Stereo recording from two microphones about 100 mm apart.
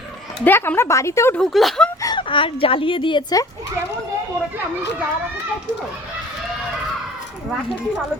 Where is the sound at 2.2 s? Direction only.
60° left (ahead or behind).